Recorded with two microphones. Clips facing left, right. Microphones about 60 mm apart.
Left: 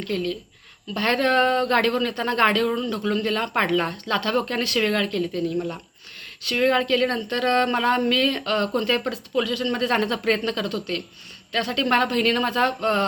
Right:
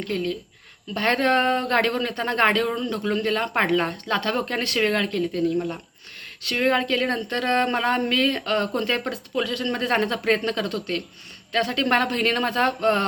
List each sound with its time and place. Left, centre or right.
0.0 s speech: right
5.5 s speech: centre
6.6 s speech: right